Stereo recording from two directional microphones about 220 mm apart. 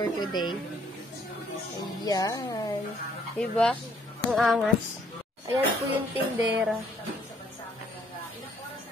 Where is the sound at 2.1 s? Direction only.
15° left (ahead or behind).